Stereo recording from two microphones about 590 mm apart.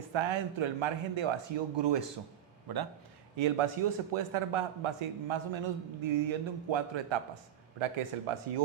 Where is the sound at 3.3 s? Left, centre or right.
Right.